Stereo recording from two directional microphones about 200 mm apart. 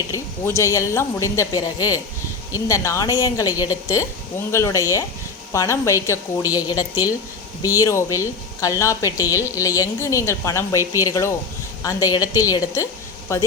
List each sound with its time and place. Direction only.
0.1 s a woman's voice: 15° left (ahead or behind)